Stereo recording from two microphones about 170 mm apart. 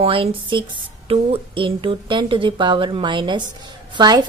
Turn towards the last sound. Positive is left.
turn(degrees=-25)  # may be behind; listen again after turning